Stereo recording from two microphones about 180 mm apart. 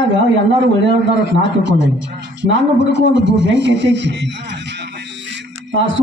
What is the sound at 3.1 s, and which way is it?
Speech, 85° right.